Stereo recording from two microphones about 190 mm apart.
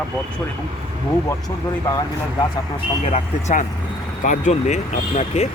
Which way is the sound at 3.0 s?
35° left (ahead or behind).